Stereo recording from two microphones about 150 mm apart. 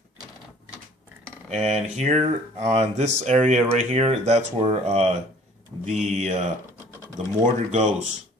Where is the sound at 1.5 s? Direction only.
50° right (ahead or behind).